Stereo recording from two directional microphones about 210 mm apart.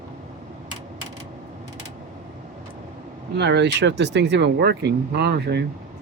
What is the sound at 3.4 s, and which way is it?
Speech, 55° right (ahead or behind).